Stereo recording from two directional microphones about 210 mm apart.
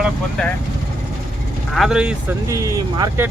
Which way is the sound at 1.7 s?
Centre (ahead or behind).